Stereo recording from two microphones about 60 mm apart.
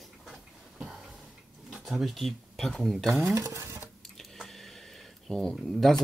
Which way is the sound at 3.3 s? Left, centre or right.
Right.